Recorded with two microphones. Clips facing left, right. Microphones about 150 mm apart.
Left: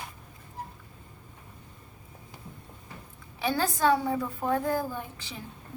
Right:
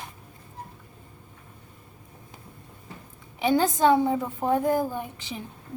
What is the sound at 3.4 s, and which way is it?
A woman's voice, 20° right (ahead or behind).